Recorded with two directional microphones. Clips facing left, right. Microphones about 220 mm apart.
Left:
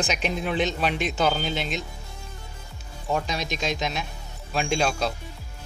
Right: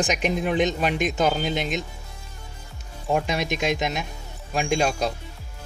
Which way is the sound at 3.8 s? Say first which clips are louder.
Right 2 dB; 15° right (ahead or behind).